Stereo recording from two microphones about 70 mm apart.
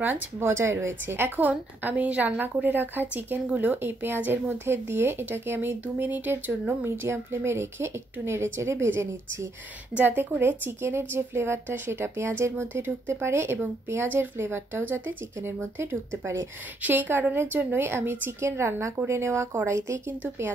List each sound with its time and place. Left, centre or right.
0.0 s a woman's voice: right
16.8 s speech: right